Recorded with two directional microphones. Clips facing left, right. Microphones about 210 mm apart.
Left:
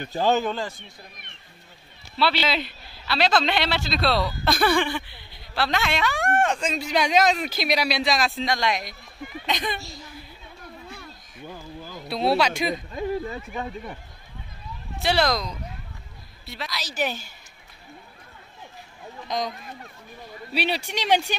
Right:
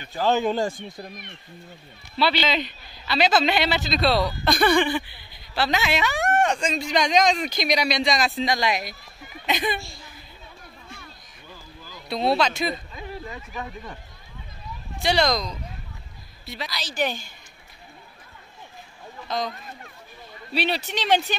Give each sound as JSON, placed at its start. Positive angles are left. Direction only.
{"t": 0.5, "sound": "a man's voice", "side_deg": -45}
{"t": 2.1, "sound": "speech", "side_deg": 0}
{"t": 9.8, "sound": "a woman's voice", "side_deg": 40}
{"t": 11.4, "sound": "a sound", "side_deg": 50}
{"t": 12.1, "sound": "speech", "side_deg": 5}
{"t": 13.5, "sound": "speech", "side_deg": 25}
{"t": 15.0, "sound": "speech", "side_deg": 5}
{"t": 19.2, "sound": "speech", "side_deg": 15}
{"t": 20.5, "sound": "speech", "side_deg": 10}